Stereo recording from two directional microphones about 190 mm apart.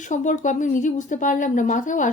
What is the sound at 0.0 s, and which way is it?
A woman's voice, 40° left (ahead or behind).